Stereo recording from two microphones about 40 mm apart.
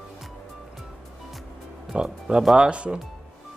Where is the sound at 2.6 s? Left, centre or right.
Right.